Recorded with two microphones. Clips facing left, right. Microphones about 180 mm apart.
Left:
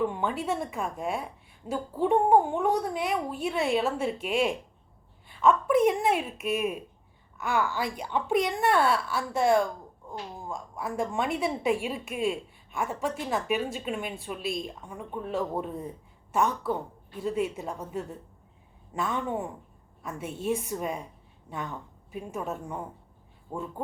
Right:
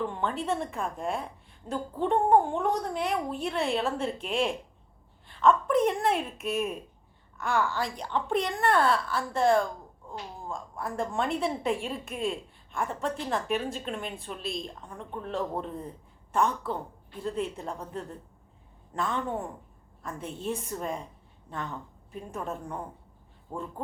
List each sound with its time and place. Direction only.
0.0 s a woman's voice: 10° left (ahead or behind)
22.1 s a woman's voice: 5° left (ahead or behind)